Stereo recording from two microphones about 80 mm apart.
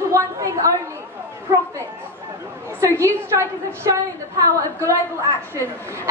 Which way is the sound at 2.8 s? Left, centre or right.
Right.